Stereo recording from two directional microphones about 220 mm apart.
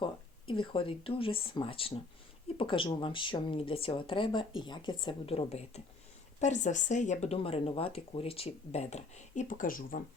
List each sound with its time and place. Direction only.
0.0 s speech: 25° left (ahead or behind); by 10.0 s 40° left (ahead or behind)